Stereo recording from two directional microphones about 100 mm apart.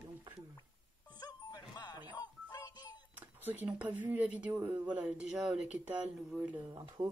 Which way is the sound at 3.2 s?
20° right (ahead or behind).